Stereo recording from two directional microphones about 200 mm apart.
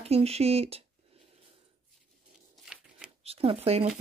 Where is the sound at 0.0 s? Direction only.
30° right (ahead or behind).